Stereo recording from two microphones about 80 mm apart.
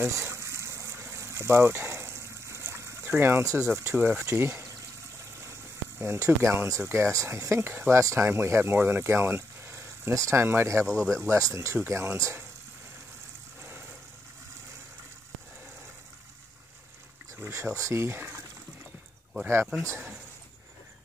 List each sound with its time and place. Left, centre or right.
0.0 s speech: right
0.4 s gush: right
3.1 s speech: right
4.0 s speech: right
5.4 s boiling: right
6.8 s speech: right
10.4 s speech: right
11.9 s speech: right
13.6 s vehicle: right
17.4 s speech: right
19.4 s speech: right